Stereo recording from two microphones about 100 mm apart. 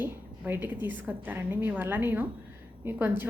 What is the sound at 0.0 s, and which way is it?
A woman's voice, 20° right (ahead or behind).